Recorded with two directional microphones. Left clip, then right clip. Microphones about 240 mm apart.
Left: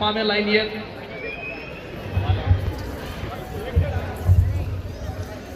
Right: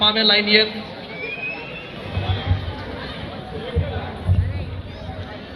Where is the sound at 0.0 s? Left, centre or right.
Left.